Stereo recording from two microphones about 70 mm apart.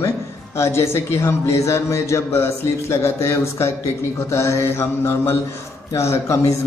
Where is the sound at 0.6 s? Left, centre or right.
Left.